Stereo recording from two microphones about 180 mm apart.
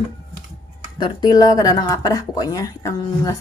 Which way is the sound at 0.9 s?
25° left (ahead or behind).